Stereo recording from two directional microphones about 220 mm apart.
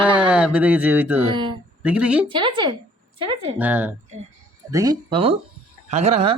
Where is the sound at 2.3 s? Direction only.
20° right (ahead or behind).